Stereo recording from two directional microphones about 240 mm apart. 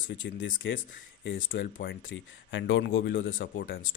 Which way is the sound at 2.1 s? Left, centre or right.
Left.